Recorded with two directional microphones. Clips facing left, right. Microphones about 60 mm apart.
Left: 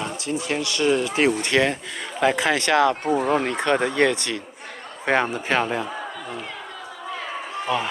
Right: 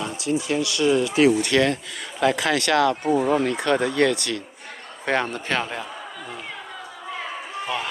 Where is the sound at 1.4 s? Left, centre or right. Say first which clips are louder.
Right 1 dB; left.